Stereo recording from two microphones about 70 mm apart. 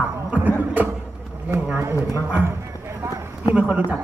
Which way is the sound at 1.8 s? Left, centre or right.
Right.